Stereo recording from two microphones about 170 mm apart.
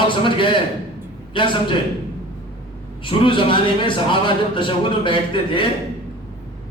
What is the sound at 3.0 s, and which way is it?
Speech, 30° left (ahead or behind).